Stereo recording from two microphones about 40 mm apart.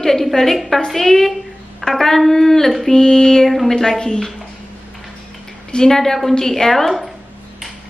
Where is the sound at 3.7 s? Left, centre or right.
Centre.